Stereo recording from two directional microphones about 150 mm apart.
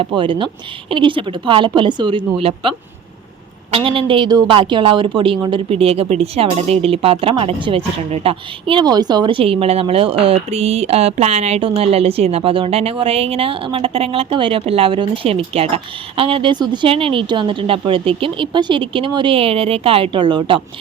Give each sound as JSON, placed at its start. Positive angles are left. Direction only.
{"t": 0.0, "sound": "a woman's voice", "side_deg": -35}